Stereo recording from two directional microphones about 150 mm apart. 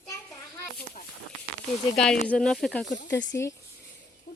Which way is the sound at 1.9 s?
5° left (ahead or behind).